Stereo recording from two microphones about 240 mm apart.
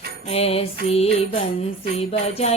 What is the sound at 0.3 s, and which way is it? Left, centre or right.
Music, left.